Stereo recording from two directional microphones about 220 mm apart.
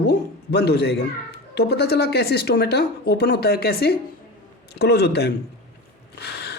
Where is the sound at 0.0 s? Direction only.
45° left (ahead or behind).